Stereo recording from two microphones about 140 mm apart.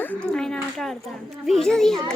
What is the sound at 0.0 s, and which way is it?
A child's voice, 10° left (ahead or behind).